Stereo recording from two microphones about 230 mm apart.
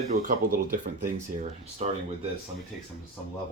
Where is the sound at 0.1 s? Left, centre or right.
Right.